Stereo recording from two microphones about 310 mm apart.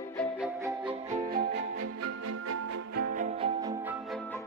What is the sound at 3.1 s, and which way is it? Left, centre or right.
Music, centre.